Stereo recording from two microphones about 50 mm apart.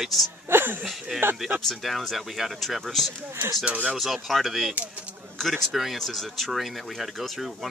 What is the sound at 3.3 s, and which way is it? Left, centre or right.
Speech, right.